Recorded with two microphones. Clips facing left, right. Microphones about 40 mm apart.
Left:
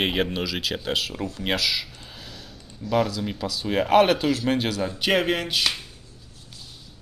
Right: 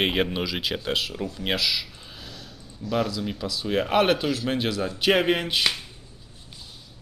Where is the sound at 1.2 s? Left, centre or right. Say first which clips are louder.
Left 2 dB; centre.